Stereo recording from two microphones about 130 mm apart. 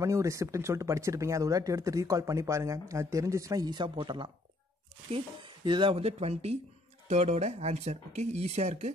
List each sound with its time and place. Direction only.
0.0 s speech: 25° right (ahead or behind); by 8.9 s 60° right (ahead or behind)